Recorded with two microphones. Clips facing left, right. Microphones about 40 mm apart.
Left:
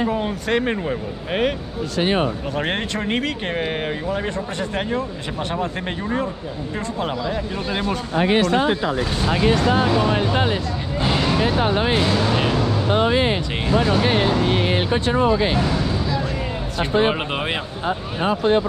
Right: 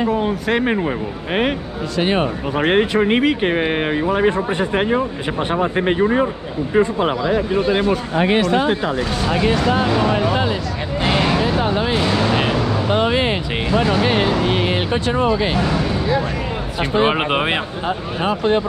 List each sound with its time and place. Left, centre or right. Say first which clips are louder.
0.1 s speech: right 3 dB; centre
2.0 s speech: right 2 dB; right
2.5 s speech: right 8 dB; centre
7.6 s speech: right 6 dB; centre
11.1 s a sound: right 3 dB; right
11.6 s music: even; left
12.1 s a sound: right 2 dB; right
12.9 s music: right 1 dB; right
13.7 s music: right 2 dB; right
15.0 s speech: even; right
15.6 s a sound: right 3 dB; right
17.1 s speech: right 5 dB; right